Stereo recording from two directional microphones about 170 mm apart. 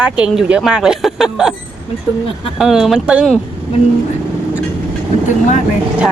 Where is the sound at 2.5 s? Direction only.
5° right (ahead or behind).